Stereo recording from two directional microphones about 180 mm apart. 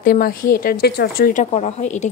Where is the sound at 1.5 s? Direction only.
40° left (ahead or behind).